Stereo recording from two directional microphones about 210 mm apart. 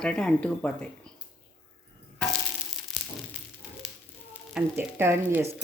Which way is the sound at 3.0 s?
Centre (ahead or behind).